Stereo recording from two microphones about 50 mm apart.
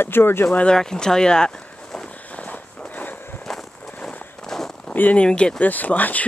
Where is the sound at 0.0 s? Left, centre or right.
Left.